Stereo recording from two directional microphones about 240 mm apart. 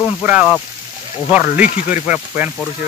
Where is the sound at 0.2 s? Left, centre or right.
Centre.